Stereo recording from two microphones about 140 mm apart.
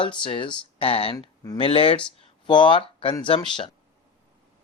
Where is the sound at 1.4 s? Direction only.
25° left (ahead or behind).